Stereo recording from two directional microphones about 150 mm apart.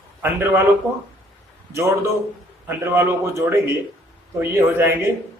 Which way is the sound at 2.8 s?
15° right (ahead or behind).